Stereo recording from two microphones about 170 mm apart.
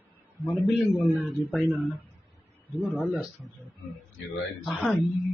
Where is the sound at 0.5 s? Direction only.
Centre (ahead or behind).